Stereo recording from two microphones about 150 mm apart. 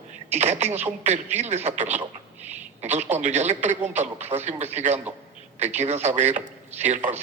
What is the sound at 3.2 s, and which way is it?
A man's voice, 50° right (ahead or behind).